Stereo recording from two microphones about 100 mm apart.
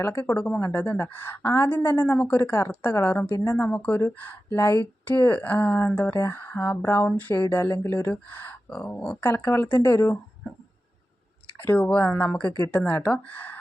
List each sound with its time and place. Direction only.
0.0 s a woman's voice: 20° left (ahead or behind)
11.6 s speech: 15° left (ahead or behind)